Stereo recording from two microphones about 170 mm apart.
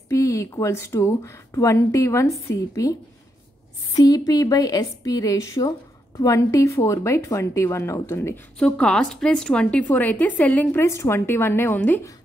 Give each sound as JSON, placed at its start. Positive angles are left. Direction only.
{"t": 0.1, "sound": "a woman's voice", "side_deg": 15}
{"t": 8.5, "sound": "speech", "side_deg": 5}